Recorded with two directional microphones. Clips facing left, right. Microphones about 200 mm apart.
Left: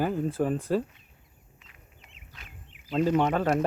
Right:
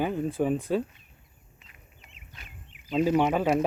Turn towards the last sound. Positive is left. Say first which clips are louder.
# right 1 dB
turn(degrees=0)  # may be behind; listen again after turning